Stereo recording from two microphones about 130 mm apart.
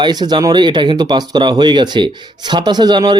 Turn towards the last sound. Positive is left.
turn(degrees=-30)  # may be behind; listen again after turning